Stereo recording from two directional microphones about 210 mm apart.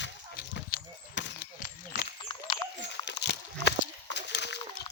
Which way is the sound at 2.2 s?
25° left (ahead or behind).